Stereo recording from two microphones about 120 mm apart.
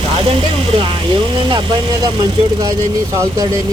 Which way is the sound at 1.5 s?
45° right (ahead or behind).